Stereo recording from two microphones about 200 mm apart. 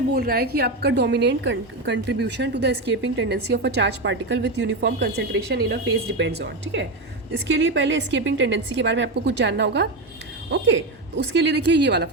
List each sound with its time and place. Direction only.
0.1 s a woman's voice: 50° right (ahead or behind)